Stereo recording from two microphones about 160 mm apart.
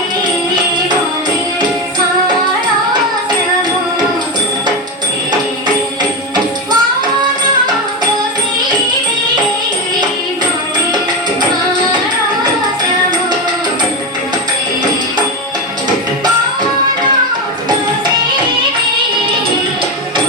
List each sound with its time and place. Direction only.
6.0 s music: 25° right (ahead or behind)